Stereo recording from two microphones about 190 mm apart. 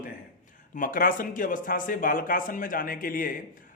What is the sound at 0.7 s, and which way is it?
Speech, 45° left (ahead or behind).